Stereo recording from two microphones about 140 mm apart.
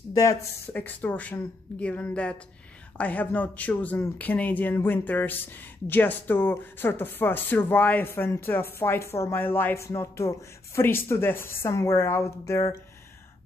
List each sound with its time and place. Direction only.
0.1 s speech: 20° left (ahead or behind)